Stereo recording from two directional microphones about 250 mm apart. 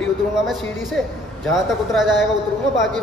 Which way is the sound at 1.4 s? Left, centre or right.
Centre.